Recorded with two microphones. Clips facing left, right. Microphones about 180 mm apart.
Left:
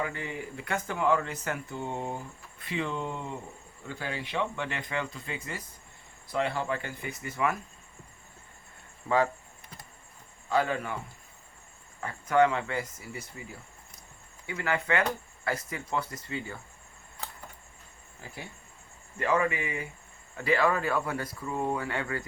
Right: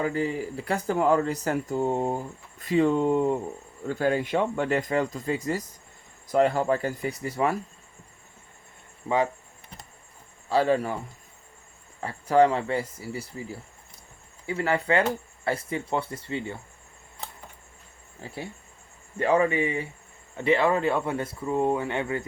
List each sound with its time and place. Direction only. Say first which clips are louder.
0.0 s speech: right 8 dB; 35° right (ahead or behind)
9.0 s speech: right 1 dB; 20° right (ahead or behind)
10.5 s speech: right 5 dB; 35° right (ahead or behind)
18.2 s speech: right 7 dB; 30° right (ahead or behind)